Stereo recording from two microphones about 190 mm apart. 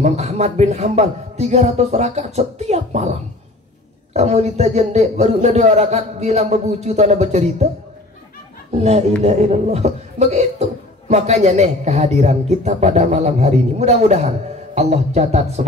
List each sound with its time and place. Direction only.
0.0 s speech: 35° right (ahead or behind)
8.7 s speech: 35° right (ahead or behind)